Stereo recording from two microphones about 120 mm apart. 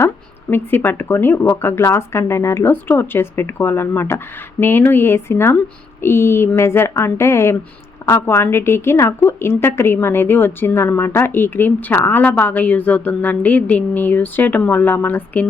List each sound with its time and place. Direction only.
0.5 s a woman's voice: 15° left (ahead or behind)